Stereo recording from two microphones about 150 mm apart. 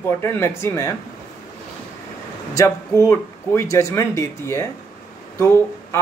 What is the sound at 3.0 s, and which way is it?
Speech, 20° left (ahead or behind).